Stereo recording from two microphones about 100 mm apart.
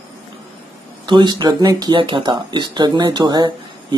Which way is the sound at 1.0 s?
50° right (ahead or behind).